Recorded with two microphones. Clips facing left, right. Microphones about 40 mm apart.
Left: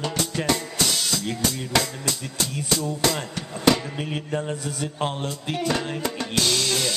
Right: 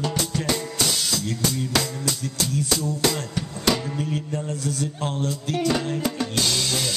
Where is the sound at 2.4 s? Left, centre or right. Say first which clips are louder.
Right 1 dB; centre.